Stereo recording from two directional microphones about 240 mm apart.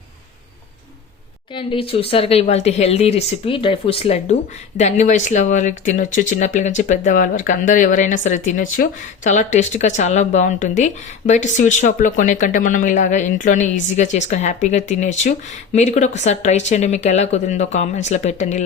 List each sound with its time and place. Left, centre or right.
1.5 s speech: left